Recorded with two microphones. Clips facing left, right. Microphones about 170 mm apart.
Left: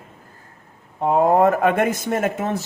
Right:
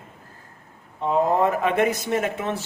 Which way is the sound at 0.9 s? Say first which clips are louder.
Left 4 dB; 55° left (ahead or behind).